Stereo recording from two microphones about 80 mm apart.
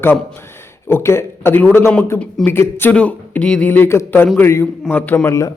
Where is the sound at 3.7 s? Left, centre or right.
Left.